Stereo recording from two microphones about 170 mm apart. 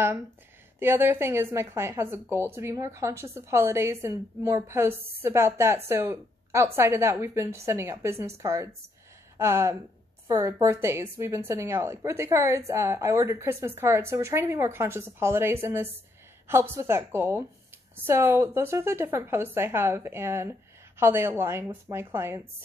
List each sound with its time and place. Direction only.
0.7 s a woman's voice: 15° right (ahead or behind)